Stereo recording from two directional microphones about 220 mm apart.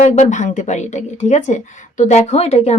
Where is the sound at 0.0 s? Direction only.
30° left (ahead or behind).